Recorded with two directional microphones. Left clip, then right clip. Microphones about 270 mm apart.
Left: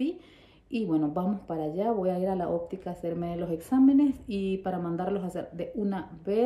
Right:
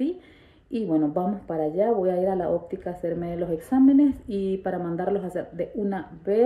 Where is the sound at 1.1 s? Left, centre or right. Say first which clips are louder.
Right 5 dB; left.